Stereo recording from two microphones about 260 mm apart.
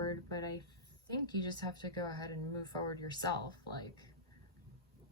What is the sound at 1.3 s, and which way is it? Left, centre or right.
Speech, centre.